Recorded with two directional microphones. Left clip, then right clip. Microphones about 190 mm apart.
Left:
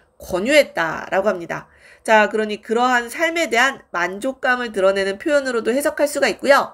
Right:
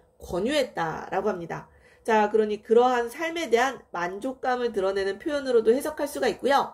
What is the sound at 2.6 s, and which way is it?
Speech, 30° left (ahead or behind).